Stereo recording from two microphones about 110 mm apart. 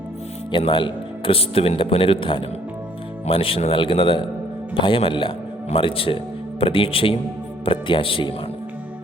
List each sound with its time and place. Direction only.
0.5 s speech: 50° left (ahead or behind)